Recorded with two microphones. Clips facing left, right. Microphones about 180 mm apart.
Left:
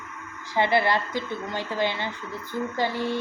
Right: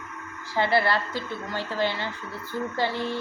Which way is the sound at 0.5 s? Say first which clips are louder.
Left 1 dB; 20° left (ahead or behind).